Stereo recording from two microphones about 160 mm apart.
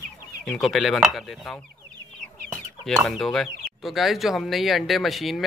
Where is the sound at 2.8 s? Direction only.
Centre (ahead or behind).